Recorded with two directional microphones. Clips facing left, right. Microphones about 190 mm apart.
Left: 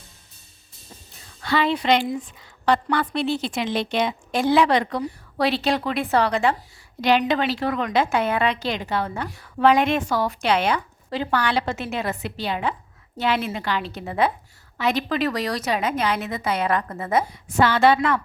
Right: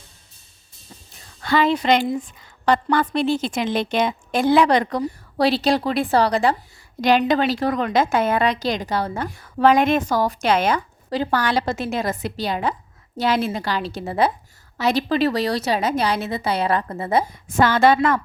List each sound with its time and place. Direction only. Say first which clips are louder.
1.5 s a woman's voice: right 2 dB; 45° right (ahead or behind)
17.6 s a woman's voice: right 2 dB; 45° right (ahead or behind)